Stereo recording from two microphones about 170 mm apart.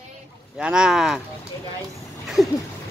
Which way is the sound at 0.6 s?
5° right (ahead or behind).